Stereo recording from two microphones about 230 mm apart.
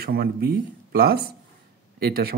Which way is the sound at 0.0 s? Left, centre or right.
Right.